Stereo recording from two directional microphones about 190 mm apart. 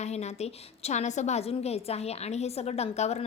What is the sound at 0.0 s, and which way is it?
A woman's voice, 35° left (ahead or behind).